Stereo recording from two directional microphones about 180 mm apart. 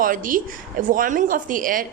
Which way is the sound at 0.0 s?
50° right (ahead or behind).